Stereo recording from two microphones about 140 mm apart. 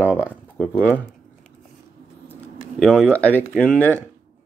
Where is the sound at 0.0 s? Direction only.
15° left (ahead or behind).